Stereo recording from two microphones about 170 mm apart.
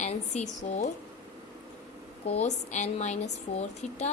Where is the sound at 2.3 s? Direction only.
40° left (ahead or behind).